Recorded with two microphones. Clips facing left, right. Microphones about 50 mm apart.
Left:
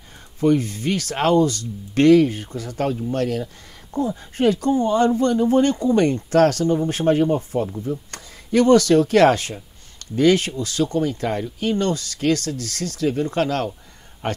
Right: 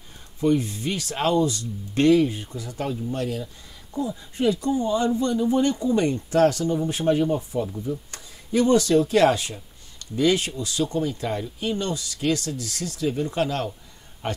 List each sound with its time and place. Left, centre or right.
0.4 s speech: left
8.1 s speech: left